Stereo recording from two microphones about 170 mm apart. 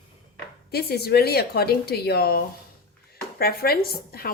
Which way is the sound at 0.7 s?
70° left (ahead or behind).